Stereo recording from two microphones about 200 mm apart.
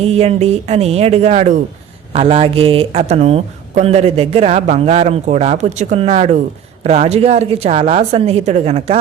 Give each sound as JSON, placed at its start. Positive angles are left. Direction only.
{"t": 0.0, "sound": "speech", "side_deg": -30}